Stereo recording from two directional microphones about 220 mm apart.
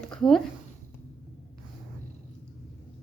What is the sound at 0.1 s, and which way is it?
Speech, centre (ahead or behind).